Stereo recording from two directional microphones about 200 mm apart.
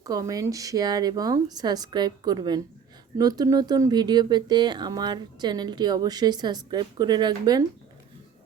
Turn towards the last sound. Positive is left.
turn(degrees=-20)  # may be behind; listen again after turning